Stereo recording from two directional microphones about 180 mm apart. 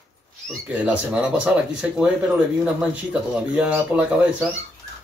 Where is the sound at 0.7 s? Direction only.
5° right (ahead or behind).